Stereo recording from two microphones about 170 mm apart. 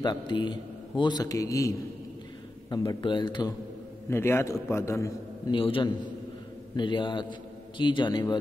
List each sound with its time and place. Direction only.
0.0 s a man's voice: 25° left (ahead or behind)
4.1 s a man's voice: 15° left (ahead or behind)
5.6 s a man's voice: 30° left (ahead or behind)